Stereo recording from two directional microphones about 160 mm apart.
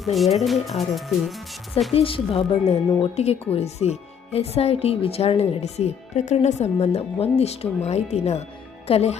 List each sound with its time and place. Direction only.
0.0 s speech: centre (ahead or behind)
1.9 s speech: 35° left (ahead or behind)